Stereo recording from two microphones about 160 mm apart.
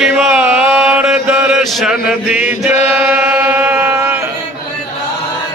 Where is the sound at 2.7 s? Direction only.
45° left (ahead or behind).